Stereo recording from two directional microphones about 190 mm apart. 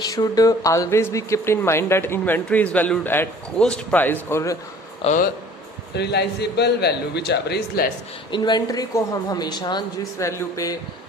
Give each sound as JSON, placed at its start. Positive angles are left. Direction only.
{"t": 0.0, "sound": "speech", "side_deg": 20}
{"t": 5.0, "sound": "speech", "side_deg": 45}
{"t": 5.9, "sound": "a man's voice", "side_deg": 60}
{"t": 8.3, "sound": "speech", "side_deg": 20}